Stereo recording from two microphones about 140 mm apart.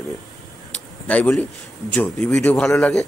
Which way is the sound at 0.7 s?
10° left (ahead or behind).